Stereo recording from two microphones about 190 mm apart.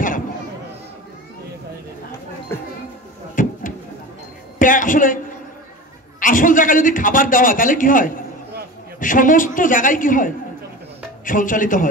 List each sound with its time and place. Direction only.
2.5 s speech: 10° left (ahead or behind)
3.4 s a sound: 45° left (ahead or behind)
4.6 s a woman's voice: 45° left (ahead or behind)